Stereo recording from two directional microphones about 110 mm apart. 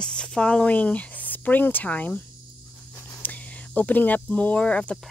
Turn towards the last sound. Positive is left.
turn(degrees=10)  # may be behind; listen again after turning